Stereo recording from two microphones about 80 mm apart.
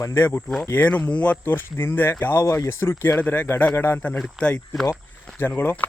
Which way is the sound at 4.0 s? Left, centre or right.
Centre.